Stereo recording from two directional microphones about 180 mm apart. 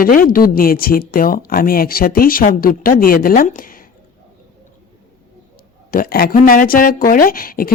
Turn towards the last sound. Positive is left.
turn(degrees=55)  # may be behind; listen again after turning